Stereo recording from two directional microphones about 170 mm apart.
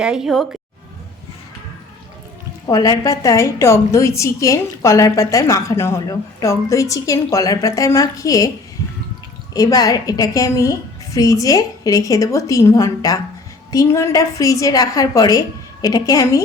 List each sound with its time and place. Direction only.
0.0 s a woman's voice: 5° right (ahead or behind)
2.6 s a woman's voice: 20° left (ahead or behind)
9.5 s a woman's voice: 20° left (ahead or behind)